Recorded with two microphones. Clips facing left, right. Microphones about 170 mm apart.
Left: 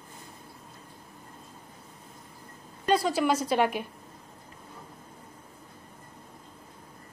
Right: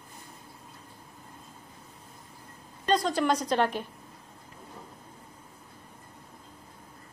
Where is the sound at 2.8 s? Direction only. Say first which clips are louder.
Left 1 dB; 5° left (ahead or behind).